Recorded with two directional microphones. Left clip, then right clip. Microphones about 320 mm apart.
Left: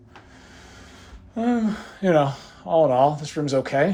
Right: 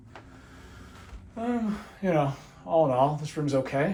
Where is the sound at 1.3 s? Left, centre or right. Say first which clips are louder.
Left 7 dB; centre.